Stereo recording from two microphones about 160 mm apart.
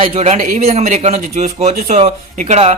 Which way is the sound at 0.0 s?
40° right (ahead or behind).